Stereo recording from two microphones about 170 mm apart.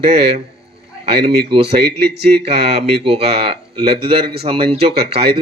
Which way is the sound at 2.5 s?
40° right (ahead or behind).